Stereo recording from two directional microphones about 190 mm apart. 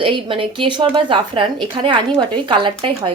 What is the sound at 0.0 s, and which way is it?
A woman's voice, 25° right (ahead or behind).